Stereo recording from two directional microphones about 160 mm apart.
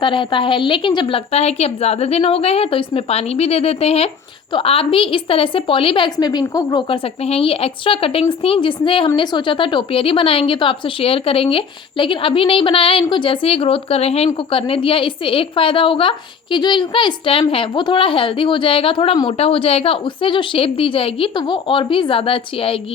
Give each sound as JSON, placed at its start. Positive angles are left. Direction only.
{"t": 0.0, "sound": "a woman's voice", "side_deg": 30}